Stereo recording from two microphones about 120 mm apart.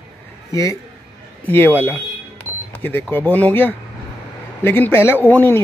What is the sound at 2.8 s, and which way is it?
Speech, 15° left (ahead or behind).